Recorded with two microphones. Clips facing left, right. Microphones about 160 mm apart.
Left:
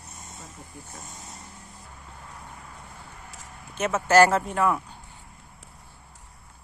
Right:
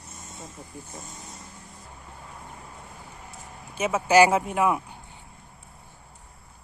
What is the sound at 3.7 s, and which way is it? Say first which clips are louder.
Speech: even; 10° right (ahead or behind).